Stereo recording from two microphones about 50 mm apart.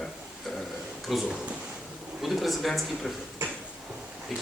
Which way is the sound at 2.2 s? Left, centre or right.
Centre.